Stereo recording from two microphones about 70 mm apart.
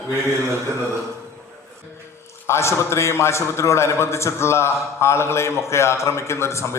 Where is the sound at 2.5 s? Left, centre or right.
Left.